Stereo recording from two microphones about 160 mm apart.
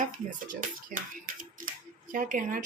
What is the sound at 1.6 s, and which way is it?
Camera, 60° right (ahead or behind).